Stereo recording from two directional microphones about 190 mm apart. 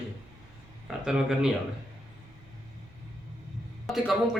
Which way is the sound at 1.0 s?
5° right (ahead or behind).